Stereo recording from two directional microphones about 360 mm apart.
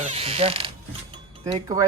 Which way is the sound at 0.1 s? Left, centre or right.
Centre.